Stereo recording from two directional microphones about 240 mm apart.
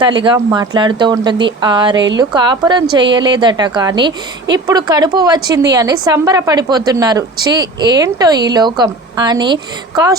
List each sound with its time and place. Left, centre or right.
0.0 s a woman's voice: centre